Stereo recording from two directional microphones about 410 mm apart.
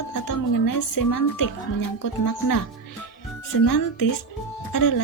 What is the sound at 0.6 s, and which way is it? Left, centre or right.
Speech, left.